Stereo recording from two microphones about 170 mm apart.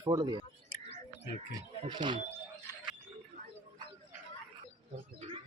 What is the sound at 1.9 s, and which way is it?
Speech, 25° right (ahead or behind).